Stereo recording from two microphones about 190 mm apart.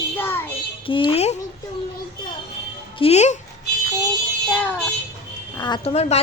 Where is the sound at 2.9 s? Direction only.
30° left (ahead or behind).